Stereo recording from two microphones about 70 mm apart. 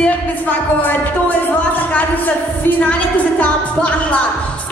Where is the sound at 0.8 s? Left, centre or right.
Left.